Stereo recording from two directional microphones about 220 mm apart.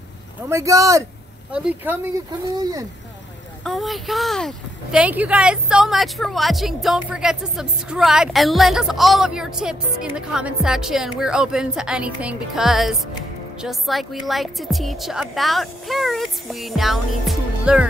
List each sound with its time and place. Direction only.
0.5 s speech: 15° right (ahead or behind)
2.4 s speech: 15° right (ahead or behind)
3.6 s speech: centre (ahead or behind)